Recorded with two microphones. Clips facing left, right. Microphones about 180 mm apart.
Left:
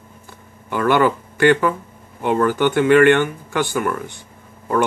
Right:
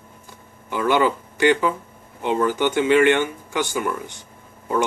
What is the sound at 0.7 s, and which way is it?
Speech, 50° left (ahead or behind).